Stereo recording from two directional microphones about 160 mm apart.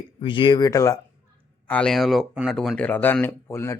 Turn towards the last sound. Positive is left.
turn(degrees=15)  # may be behind; listen again after turning